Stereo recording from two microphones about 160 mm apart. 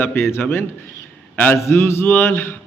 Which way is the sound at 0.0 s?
15° left (ahead or behind).